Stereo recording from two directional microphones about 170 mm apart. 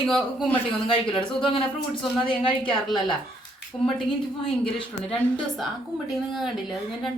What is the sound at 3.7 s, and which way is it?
Speech, 25° left (ahead or behind).